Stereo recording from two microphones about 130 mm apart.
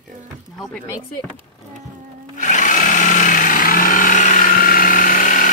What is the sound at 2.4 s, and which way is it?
Power tool, 75° left (ahead or behind).